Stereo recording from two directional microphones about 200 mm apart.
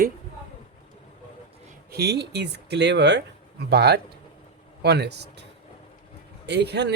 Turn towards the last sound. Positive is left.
turn(degrees=-60)  # may be behind; listen again after turning